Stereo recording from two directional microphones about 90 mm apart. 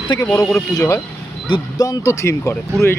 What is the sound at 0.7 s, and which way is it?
Speech, 40° left (ahead or behind).